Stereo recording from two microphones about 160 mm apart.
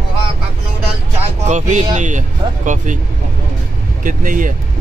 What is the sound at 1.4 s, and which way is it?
Speech, 45° right (ahead or behind).